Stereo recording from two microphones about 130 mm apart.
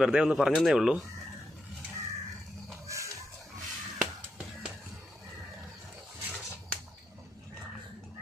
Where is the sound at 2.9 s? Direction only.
25° right (ahead or behind).